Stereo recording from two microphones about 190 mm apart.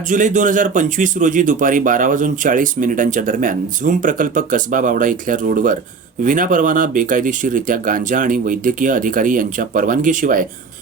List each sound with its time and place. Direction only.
0.1 s speech: 40° right (ahead or behind)